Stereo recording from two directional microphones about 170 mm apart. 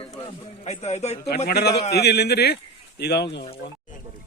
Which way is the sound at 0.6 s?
40° left (ahead or behind).